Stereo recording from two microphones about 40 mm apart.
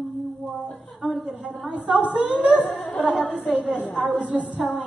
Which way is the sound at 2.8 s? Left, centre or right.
Left.